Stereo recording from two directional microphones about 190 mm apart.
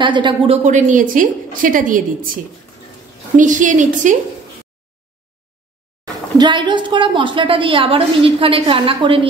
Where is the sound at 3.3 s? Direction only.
40° right (ahead or behind).